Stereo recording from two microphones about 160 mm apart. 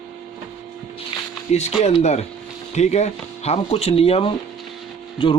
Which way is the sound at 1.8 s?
45° left (ahead or behind).